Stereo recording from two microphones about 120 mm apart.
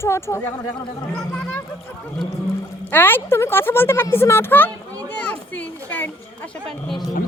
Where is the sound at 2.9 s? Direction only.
15° left (ahead or behind).